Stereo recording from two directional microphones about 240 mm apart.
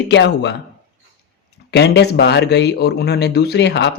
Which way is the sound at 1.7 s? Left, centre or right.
Left.